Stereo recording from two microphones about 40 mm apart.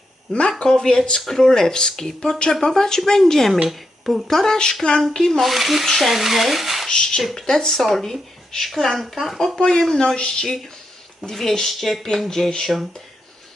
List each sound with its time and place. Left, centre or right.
0.6 s speech: centre
3.7 s speech: centre
4.3 s speech: centre
5.4 s speech: centre
6.8 s speech: centre
7.2 s speech: centre
9.1 s speech: centre
9.7 s speech: centre
11.3 s speech: centre
12.2 s speech: centre